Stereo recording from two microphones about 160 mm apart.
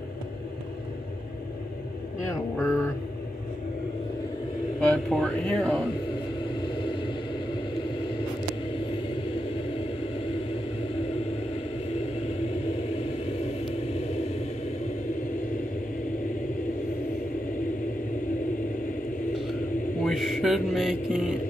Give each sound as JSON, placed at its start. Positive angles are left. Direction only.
{"t": 2.5, "sound": "speech", "side_deg": 15}
{"t": 4.7, "sound": "speech", "side_deg": 5}
{"t": 6.6, "sound": "vehicle", "side_deg": 30}
{"t": 20.1, "sound": "mantra", "side_deg": 0}